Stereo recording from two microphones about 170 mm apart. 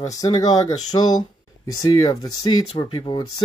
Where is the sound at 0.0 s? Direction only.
20° left (ahead or behind).